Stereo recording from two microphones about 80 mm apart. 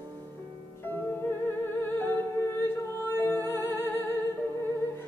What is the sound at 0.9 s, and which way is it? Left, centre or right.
Music, left.